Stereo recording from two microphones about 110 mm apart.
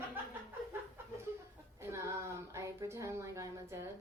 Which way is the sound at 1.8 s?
25° right (ahead or behind).